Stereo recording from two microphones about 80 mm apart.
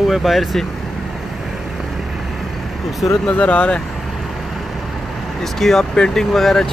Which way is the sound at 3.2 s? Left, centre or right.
Centre.